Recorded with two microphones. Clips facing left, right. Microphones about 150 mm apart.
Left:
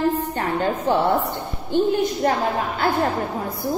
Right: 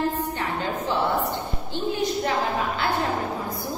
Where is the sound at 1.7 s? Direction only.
50° left (ahead or behind).